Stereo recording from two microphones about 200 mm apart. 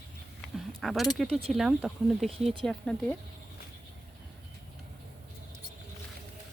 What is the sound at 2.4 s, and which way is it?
Speech, 30° right (ahead or behind).